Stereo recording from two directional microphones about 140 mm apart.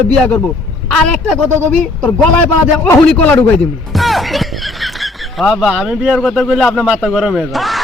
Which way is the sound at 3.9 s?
Centre (ahead or behind).